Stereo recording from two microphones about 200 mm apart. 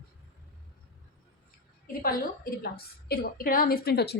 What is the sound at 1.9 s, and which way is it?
A woman's voice, 45° left (ahead or behind).